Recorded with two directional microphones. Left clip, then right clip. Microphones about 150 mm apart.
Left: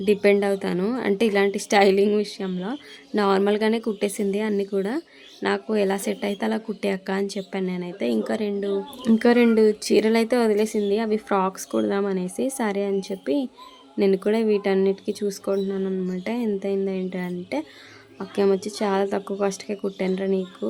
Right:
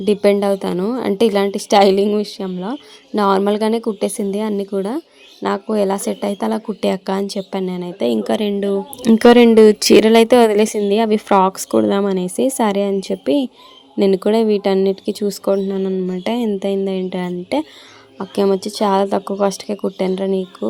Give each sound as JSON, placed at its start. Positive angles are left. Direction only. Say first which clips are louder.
{"t": 0.0, "sound": "a woman's voice", "louder": "right 5 dB", "side_deg": -25}
{"t": 8.2, "sound": "speech", "louder": "right 7 dB", "side_deg": -45}
{"t": 9.6, "sound": "speech", "louder": "right 10 dB", "side_deg": -60}
{"t": 18.2, "sound": "speech", "louder": "right 5 dB", "side_deg": -30}